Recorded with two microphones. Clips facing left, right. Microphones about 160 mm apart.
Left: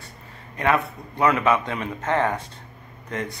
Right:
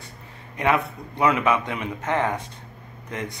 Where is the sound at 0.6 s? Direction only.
15° right (ahead or behind).